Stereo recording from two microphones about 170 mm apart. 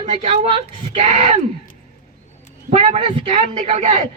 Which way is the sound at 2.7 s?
40° right (ahead or behind).